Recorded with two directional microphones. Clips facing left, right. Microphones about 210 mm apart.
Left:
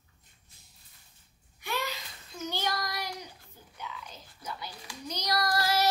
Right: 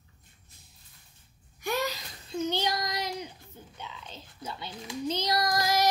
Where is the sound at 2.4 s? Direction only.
20° right (ahead or behind).